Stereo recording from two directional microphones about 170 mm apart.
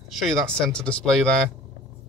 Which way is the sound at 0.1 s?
Centre (ahead or behind).